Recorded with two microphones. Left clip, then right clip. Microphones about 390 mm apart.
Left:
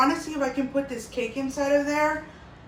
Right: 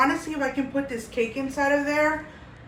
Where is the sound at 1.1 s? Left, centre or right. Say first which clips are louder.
Right 3 dB; centre.